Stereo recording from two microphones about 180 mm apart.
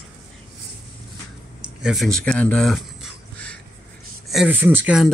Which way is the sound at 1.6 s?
5° right (ahead or behind).